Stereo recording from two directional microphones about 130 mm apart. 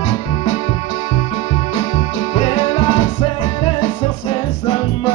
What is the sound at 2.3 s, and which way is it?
Music, 50° left (ahead or behind).